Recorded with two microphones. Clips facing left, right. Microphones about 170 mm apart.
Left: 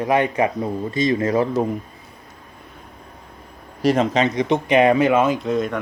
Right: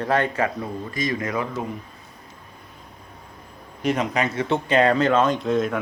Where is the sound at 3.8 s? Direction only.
30° left (ahead or behind).